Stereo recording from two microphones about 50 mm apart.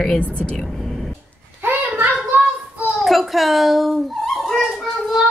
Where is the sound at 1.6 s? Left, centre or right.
Right.